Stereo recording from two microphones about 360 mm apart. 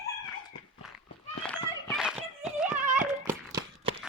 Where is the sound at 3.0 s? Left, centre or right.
Centre.